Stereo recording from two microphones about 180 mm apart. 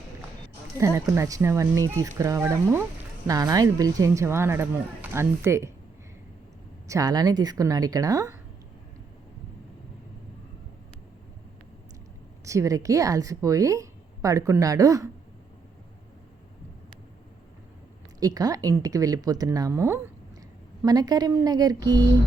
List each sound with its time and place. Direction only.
0.8 s speech: 15° right (ahead or behind)
6.8 s a woman's voice: 20° right (ahead or behind)
12.5 s a woman's voice: 15° right (ahead or behind)
18.2 s a woman's voice: 20° right (ahead or behind)